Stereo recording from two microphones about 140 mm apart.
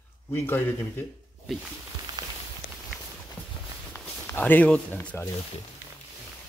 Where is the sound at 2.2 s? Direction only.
30° right (ahead or behind).